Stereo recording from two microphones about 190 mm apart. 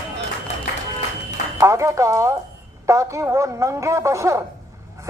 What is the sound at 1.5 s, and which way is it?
Speech, 15° right (ahead or behind).